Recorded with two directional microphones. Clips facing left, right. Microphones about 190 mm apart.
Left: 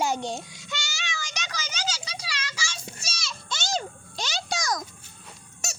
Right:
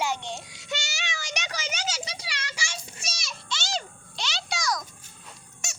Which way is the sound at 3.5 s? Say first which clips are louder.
Left 3 dB; 50° left (ahead or behind).